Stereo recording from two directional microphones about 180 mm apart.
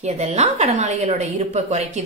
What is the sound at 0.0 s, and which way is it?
A woman's voice, 40° right (ahead or behind).